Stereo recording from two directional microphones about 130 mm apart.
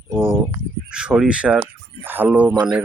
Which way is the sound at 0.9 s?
5° right (ahead or behind).